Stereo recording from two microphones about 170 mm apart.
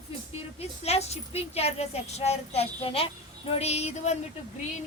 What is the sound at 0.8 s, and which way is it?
Speech, 40° left (ahead or behind).